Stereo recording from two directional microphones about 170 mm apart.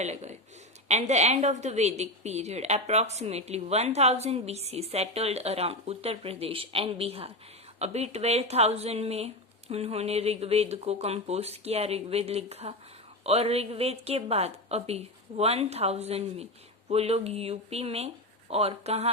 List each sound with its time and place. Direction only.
0.0 s a woman's voice: 40° right (ahead or behind)